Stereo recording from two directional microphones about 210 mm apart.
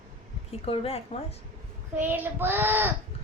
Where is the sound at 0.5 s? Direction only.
30° left (ahead or behind).